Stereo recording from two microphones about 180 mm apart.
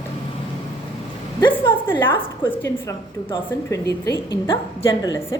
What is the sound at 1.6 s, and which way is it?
A woman's voice, 25° left (ahead or behind).